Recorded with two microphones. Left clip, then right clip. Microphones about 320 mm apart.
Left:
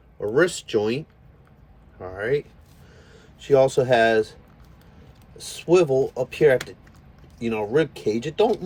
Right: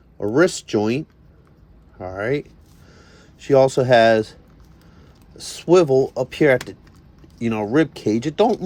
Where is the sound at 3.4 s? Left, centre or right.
Right.